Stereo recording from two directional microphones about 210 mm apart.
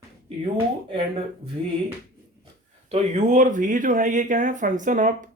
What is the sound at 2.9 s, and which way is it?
Speech, 35° right (ahead or behind).